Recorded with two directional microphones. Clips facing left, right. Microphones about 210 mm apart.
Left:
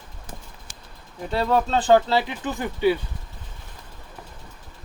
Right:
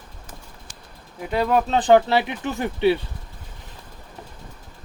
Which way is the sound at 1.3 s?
15° right (ahead or behind).